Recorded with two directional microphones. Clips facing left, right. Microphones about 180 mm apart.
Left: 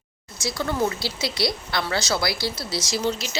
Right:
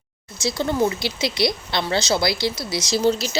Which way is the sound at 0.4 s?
25° right (ahead or behind).